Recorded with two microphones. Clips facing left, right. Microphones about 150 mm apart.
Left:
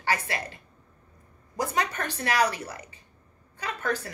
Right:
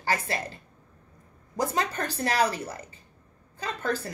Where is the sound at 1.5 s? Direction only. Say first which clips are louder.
Right 1 dB; 35° right (ahead or behind).